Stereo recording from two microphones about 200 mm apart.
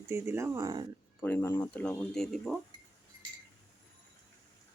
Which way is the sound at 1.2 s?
10° left (ahead or behind).